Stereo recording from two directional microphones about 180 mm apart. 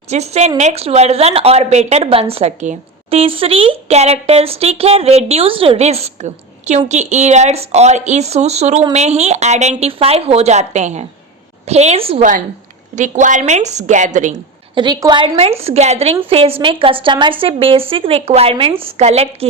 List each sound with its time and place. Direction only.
0.1 s speech: 40° right (ahead or behind)
13.0 s a woman's voice: 45° right (ahead or behind)
14.8 s a woman's voice: 25° right (ahead or behind)